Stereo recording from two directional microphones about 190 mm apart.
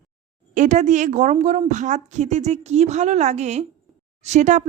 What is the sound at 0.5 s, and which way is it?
Speech, 40° right (ahead or behind).